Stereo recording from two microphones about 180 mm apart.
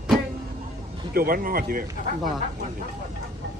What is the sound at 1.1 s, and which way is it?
Speech, 55° right (ahead or behind).